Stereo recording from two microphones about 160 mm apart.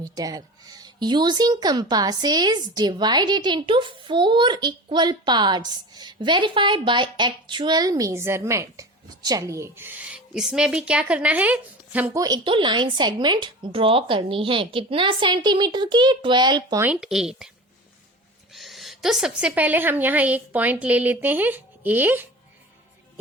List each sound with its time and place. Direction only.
0.0 s speech: 25° right (ahead or behind)
12.2 s speech: 30° right (ahead or behind)
16.8 s speech: 5° right (ahead or behind)
18.5 s a woman's voice: centre (ahead or behind)